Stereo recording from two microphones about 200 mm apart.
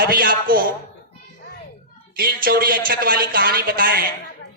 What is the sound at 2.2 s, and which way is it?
Speech, 50° right (ahead or behind).